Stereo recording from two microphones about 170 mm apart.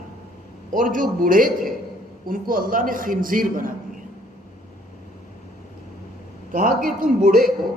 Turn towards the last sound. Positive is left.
turn(degrees=-55)  # may be behind; listen again after turning